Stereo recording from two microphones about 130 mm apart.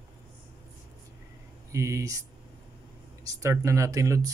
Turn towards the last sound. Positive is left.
turn(degrees=-25)  # may be behind; listen again after turning